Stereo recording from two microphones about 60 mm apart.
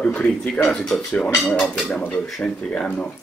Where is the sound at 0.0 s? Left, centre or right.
Left.